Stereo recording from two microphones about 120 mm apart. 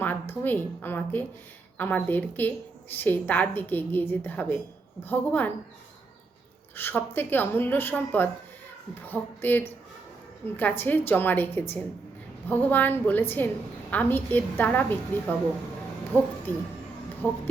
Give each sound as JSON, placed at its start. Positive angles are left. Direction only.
{"t": 0.0, "sound": "a woman's voice", "side_deg": 15}
{"t": 6.7, "sound": "a woman's voice", "side_deg": 15}